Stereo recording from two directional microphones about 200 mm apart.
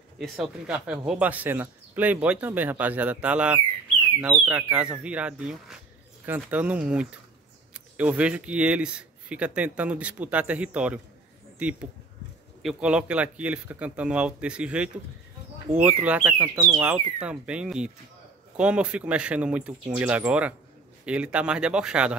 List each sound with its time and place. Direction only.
0.2 s speech: 5° right (ahead or behind)